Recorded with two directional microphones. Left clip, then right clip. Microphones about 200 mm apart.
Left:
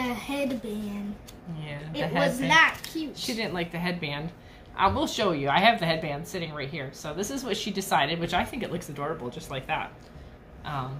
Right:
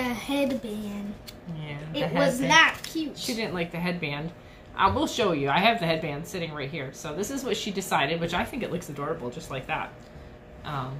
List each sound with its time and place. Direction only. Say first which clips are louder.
0.0 s speech: right 2 dB; 5° right (ahead or behind)
2.2 s a child's voice: right 1 dB; centre (ahead or behind)
3.2 s a woman's voice: left 2 dB; 20° left (ahead or behind)